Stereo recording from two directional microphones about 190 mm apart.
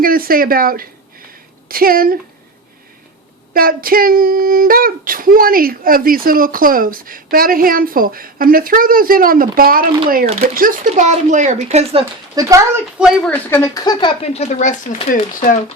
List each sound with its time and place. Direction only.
0.0 s speech: 50° right (ahead or behind)
3.5 s speech: 50° right (ahead or behind); by 12.0 s 35° right (ahead or behind)
12.4 s a child's voice: 15° right (ahead or behind)
13.0 s speech: centre (ahead or behind); by 15.5 s 45° left (ahead or behind)